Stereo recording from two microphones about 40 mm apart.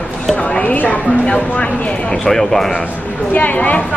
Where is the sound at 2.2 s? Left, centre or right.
Centre.